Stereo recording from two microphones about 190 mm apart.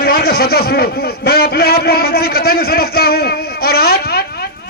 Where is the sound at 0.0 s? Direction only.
55° left (ahead or behind).